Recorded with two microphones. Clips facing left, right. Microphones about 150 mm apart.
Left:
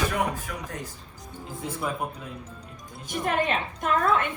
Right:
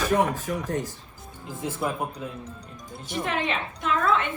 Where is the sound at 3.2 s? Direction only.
50° left (ahead or behind).